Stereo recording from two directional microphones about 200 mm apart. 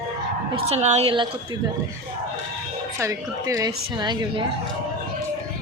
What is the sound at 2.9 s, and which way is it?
A woman's voice, 15° right (ahead or behind).